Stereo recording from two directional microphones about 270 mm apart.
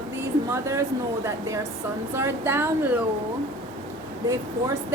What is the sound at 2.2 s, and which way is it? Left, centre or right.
Speech, centre.